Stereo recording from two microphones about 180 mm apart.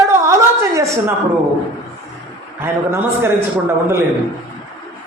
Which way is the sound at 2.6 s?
15° right (ahead or behind).